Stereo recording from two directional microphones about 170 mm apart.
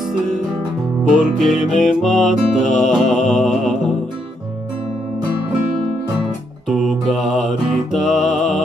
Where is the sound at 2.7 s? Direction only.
45° left (ahead or behind).